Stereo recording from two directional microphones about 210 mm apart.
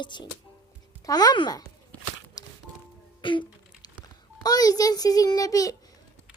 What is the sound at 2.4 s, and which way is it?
Music, 15° left (ahead or behind).